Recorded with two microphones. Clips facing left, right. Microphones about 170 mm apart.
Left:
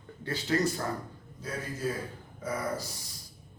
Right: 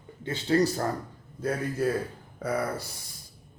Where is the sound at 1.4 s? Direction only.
60° right (ahead or behind).